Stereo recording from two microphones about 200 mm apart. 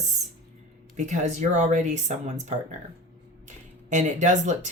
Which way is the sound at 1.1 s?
35° right (ahead or behind).